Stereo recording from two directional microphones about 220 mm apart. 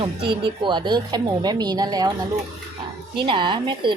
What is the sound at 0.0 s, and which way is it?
Speech, 25° right (ahead or behind).